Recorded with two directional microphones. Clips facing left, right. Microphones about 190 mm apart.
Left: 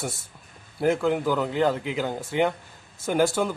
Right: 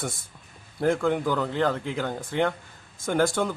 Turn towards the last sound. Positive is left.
turn(degrees=5)  # may be behind; listen again after turning